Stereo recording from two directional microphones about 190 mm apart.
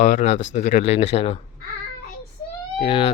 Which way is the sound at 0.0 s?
40° left (ahead or behind).